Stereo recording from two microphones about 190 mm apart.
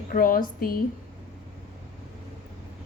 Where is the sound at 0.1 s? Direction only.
45° left (ahead or behind).